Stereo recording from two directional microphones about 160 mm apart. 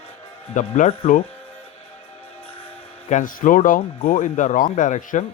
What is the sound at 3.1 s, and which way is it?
Speech, 55° left (ahead or behind).